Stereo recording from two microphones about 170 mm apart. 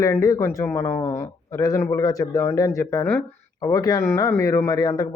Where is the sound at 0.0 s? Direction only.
20° left (ahead or behind).